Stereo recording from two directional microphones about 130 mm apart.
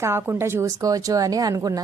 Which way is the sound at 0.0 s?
20° right (ahead or behind).